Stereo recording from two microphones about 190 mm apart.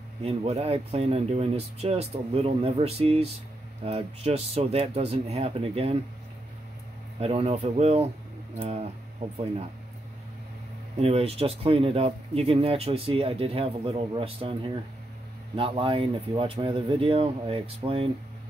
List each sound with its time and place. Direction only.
0.2 s speech: 30° right (ahead or behind)
7.2 s speech: 30° right (ahead or behind)
11.0 s speech: 35° right (ahead or behind)